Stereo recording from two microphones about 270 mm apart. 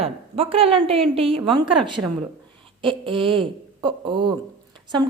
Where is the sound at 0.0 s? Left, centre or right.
Right.